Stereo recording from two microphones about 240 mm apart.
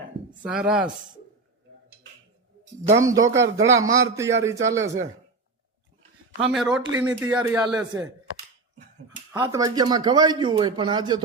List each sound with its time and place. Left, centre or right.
0.4 s speech: centre
3.0 s a man's voice: centre
6.4 s a man's voice: centre
9.3 s a man's voice: centre